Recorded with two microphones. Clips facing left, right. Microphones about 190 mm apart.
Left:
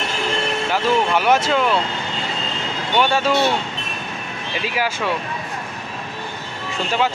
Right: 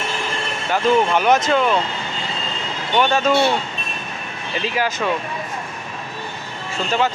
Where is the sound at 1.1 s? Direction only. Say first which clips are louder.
Right 1 dB; 10° left (ahead or behind).